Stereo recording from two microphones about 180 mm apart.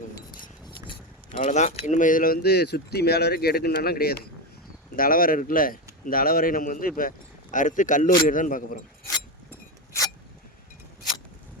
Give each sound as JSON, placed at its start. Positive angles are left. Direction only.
{"t": 0.4, "sound": "keys jangling", "side_deg": 30}
{"t": 1.4, "sound": "speech", "side_deg": 40}